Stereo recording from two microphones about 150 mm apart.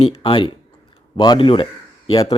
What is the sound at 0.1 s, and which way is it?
Speech, 35° left (ahead or behind).